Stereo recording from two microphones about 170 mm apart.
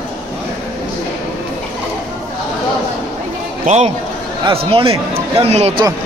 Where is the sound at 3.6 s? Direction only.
40° right (ahead or behind).